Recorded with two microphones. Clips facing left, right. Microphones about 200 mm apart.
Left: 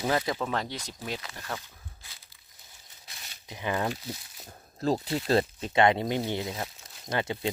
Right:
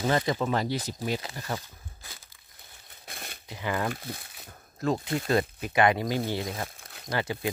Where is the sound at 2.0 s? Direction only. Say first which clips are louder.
Right 6 dB; 45° right (ahead or behind).